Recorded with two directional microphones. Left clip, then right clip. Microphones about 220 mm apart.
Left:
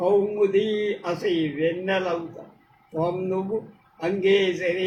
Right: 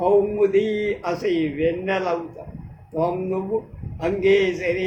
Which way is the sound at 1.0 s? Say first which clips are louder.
Right 2 dB; 15° right (ahead or behind).